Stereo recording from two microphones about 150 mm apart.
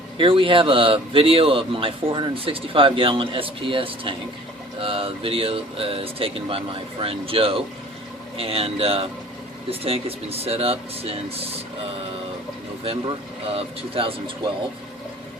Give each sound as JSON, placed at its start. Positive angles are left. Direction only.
{"t": 0.2, "sound": "a man's voice", "side_deg": -35}
{"t": 13.5, "sound": "a man's voice", "side_deg": -40}